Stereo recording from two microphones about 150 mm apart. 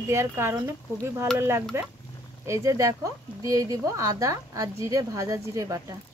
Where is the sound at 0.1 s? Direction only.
15° right (ahead or behind).